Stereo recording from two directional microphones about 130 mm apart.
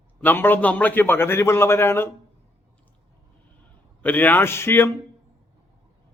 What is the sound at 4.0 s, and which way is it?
Speech, 15° left (ahead or behind).